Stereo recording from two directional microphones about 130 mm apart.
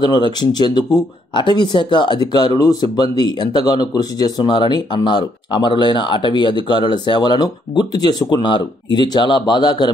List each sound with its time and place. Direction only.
0.0 s speech: 35° left (ahead or behind)